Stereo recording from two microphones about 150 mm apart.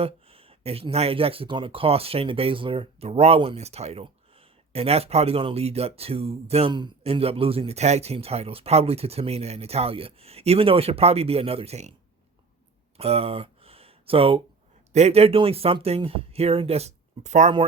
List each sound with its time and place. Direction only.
0.0 s speech: 40° right (ahead or behind)
13.0 s speech: 40° right (ahead or behind)